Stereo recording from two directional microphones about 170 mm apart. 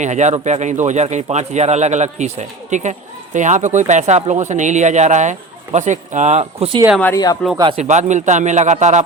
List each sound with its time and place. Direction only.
0.0 s speech: 45° right (ahead or behind)
6.4 s speech: 30° right (ahead or behind)
7.9 s speech: 45° right (ahead or behind)